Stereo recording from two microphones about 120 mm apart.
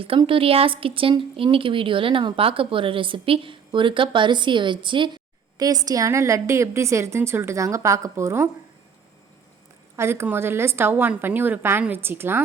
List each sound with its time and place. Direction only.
0.3 s speech: 50° right (ahead or behind); by 8.4 s 20° right (ahead or behind)
9.9 s a woman's voice: 20° right (ahead or behind)